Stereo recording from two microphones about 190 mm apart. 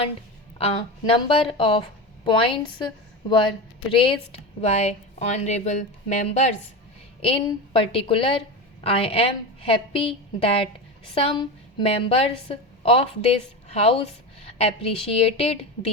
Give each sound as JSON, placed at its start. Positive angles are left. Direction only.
{"t": 0.6, "sound": "a woman's voice", "side_deg": 30}